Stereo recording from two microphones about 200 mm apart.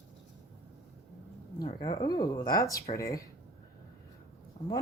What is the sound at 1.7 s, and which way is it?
Speech, 30° left (ahead or behind).